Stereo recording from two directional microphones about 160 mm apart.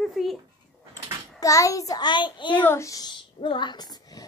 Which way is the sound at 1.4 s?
20° left (ahead or behind).